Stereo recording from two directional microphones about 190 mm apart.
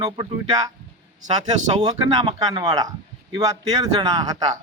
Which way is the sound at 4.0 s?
20° right (ahead or behind).